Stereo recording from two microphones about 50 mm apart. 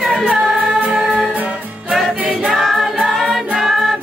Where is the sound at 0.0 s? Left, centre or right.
Right.